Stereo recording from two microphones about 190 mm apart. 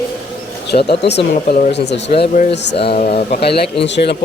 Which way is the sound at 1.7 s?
65° left (ahead or behind).